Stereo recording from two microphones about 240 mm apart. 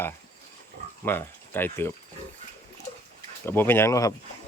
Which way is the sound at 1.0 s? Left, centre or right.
Centre.